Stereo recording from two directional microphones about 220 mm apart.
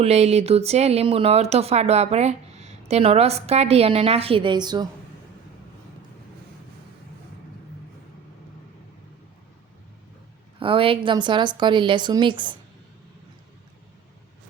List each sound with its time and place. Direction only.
0.0 s speech: 30° right (ahead or behind)
10.6 s speech: 25° right (ahead or behind)